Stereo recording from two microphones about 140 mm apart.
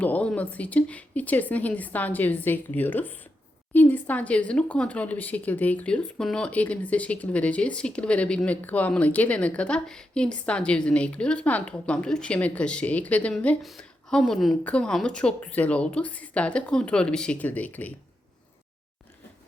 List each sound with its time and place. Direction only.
0.0 s speech: 10° left (ahead or behind)